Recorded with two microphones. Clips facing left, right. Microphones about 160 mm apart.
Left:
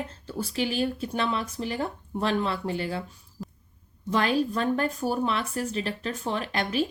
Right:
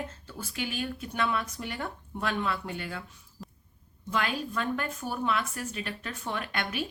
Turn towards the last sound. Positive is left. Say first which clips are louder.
# left 6 dB
turn(degrees=30)  # may be behind; listen again after turning